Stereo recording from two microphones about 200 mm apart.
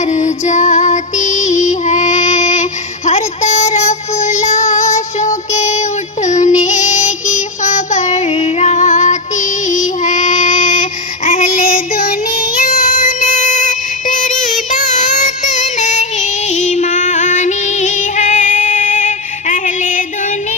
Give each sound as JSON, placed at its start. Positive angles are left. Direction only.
{"t": 0.0, "sound": "music", "side_deg": 35}
{"t": 3.1, "sound": "child singing", "side_deg": 35}